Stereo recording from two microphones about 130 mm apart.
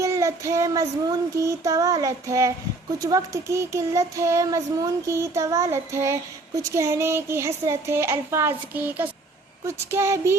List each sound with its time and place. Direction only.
0.0 s speech: 25° right (ahead or behind)